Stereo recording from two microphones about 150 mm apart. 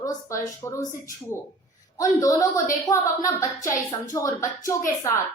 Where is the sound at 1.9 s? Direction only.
25° left (ahead or behind).